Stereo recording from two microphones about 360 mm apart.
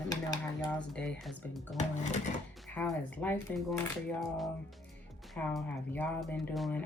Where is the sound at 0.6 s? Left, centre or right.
Centre.